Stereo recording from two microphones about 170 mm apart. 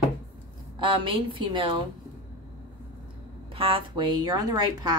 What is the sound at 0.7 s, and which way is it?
A woman's voice, 30° right (ahead or behind).